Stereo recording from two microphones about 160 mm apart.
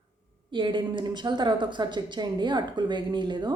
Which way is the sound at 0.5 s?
30° right (ahead or behind).